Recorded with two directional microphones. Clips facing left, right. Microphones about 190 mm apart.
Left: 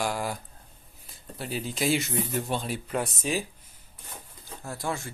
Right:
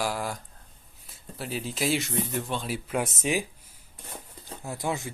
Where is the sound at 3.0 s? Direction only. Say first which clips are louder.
Right 2 dB; 20° right (ahead or behind).